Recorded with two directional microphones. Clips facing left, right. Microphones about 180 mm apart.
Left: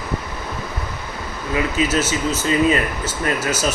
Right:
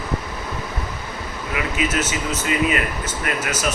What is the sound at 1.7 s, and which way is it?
A man's voice, 30° left (ahead or behind).